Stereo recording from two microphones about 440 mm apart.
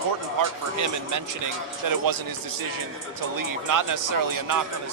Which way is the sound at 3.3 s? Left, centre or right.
Right.